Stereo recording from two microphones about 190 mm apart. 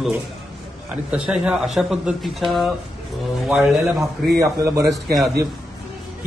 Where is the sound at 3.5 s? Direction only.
Centre (ahead or behind).